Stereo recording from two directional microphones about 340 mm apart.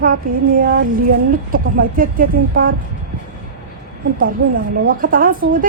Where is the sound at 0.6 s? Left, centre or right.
Right.